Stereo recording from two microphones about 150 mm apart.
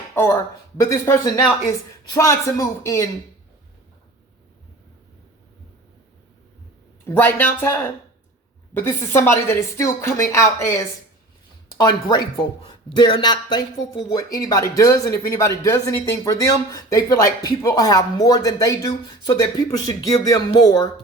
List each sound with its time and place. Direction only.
0.1 s speech: 15° left (ahead or behind)
7.1 s speech: 15° left (ahead or behind)